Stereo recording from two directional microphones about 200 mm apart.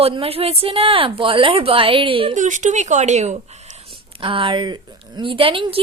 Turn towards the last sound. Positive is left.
turn(degrees=-25)  # may be behind; listen again after turning